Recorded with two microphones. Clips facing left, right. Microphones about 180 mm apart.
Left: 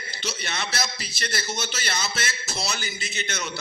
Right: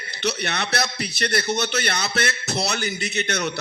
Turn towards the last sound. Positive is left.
turn(degrees=-65)  # may be behind; listen again after turning